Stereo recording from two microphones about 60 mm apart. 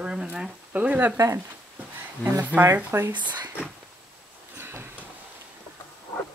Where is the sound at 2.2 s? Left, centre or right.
Left.